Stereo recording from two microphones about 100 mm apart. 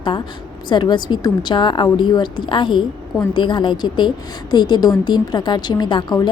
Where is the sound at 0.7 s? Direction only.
50° left (ahead or behind).